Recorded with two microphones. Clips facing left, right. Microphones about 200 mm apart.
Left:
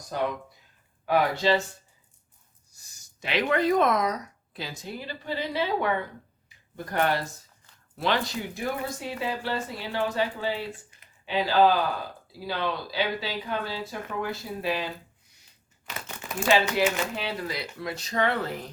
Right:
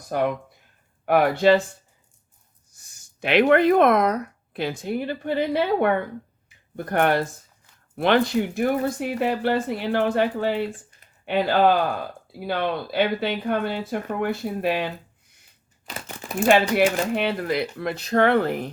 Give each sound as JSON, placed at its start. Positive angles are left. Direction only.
{"t": 0.1, "sound": "speech", "side_deg": -60}
{"t": 3.2, "sound": "speech", "side_deg": -55}
{"t": 15.9, "sound": "a sound", "side_deg": -30}
{"t": 17.2, "sound": "speech", "side_deg": -55}